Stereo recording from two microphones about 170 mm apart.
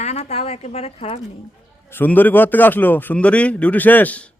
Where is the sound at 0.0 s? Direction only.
40° left (ahead or behind).